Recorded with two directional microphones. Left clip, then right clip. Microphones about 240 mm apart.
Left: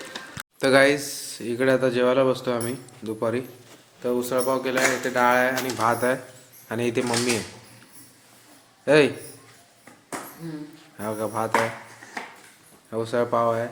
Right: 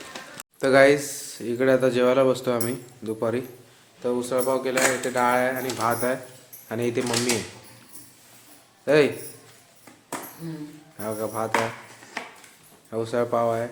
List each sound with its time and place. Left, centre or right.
0.1 s a sound: centre
0.6 s speech: centre
8.8 s a man's voice: centre
10.9 s speech: centre
12.9 s speech: centre